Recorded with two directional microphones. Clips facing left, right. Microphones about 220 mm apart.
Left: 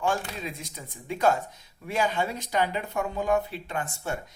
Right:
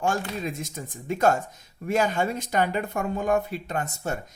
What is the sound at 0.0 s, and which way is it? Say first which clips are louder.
Speech: right 2 dB; 45° right (ahead or behind).